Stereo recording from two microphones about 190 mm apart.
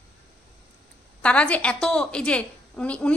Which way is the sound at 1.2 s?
5° left (ahead or behind).